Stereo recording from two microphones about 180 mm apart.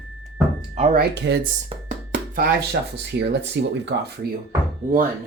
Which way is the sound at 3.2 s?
70° right (ahead or behind).